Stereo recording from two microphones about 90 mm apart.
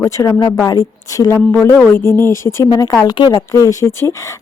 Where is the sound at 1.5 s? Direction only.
25° left (ahead or behind).